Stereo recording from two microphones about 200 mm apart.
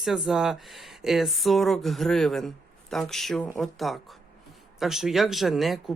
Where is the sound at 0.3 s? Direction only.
Centre (ahead or behind).